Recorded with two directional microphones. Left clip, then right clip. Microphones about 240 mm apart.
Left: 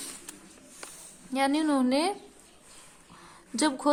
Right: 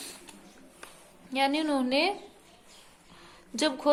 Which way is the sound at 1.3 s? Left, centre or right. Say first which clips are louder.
Left 1 dB; left.